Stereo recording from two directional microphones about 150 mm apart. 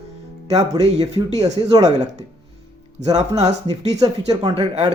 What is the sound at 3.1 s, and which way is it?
Speech, 50° right (ahead or behind).